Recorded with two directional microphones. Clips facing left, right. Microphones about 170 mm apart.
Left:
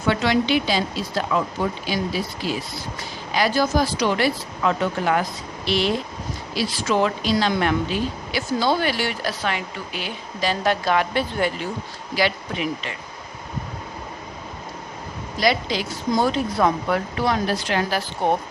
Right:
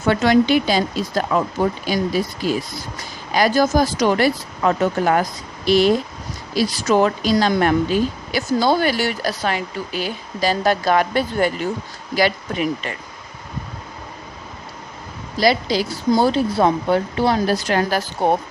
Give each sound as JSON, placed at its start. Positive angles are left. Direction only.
{"t": 0.0, "sound": "a woman's voice", "side_deg": -45}
{"t": 15.4, "sound": "speech", "side_deg": -35}